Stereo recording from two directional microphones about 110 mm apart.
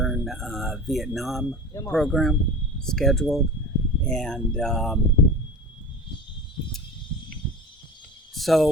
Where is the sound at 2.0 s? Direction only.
Centre (ahead or behind).